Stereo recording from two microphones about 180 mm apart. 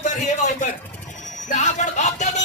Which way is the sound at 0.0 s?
45° left (ahead or behind).